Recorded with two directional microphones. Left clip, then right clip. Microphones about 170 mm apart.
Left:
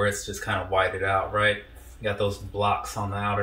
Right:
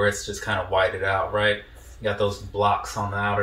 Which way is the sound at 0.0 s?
15° left (ahead or behind).